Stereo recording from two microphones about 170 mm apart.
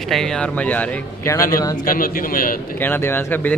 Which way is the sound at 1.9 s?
55° left (ahead or behind).